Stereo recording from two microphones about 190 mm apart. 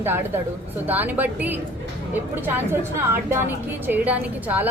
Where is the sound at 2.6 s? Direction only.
15° right (ahead or behind).